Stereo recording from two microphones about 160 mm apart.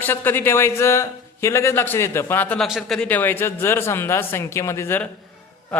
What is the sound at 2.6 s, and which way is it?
A man's voice, centre (ahead or behind).